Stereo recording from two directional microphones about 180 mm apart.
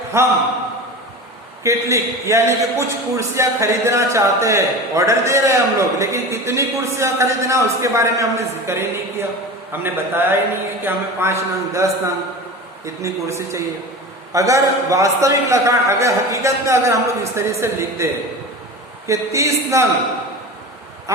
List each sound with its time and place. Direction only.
0.1 s a man's voice: 15° right (ahead or behind)
1.6 s a man's voice: 15° right (ahead or behind)